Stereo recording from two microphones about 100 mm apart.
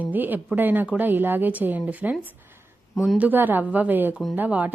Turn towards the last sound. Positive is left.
turn(degrees=-15)  # may be behind; listen again after turning